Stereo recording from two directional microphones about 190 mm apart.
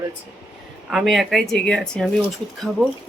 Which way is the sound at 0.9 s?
Centre (ahead or behind).